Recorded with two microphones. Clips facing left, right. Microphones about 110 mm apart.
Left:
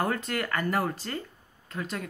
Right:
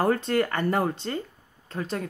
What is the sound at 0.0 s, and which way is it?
Speech, 30° right (ahead or behind).